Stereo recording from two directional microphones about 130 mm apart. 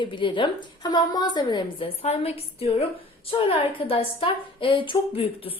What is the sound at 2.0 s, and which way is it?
A woman's voice, 50° left (ahead or behind).